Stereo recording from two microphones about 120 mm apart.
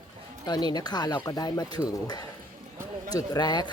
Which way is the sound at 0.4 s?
35° left (ahead or behind).